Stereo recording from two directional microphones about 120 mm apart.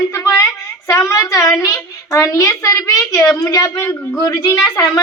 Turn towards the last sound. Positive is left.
turn(degrees=30)  # may be behind; listen again after turning